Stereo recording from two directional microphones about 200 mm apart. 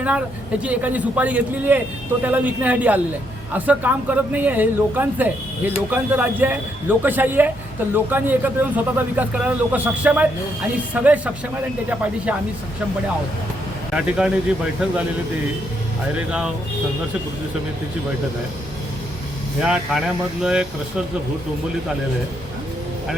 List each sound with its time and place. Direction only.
0.6 s speech: 5° right (ahead or behind)
13.9 s speech: 5° right (ahead or behind)
16.1 s speech: 5° right (ahead or behind)
19.6 s speech: 5° right (ahead or behind)